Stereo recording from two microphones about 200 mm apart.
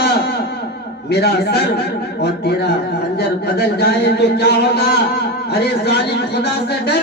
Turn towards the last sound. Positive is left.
turn(degrees=55)  # may be behind; listen again after turning